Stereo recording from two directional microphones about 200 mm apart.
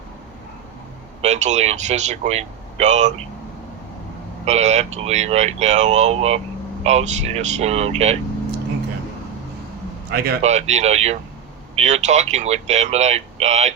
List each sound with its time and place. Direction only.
1.2 s speech: 35° right (ahead or behind)
4.4 s speech: 35° right (ahead or behind)
10.1 s speech: 50° right (ahead or behind)
10.4 s speech: 35° right (ahead or behind)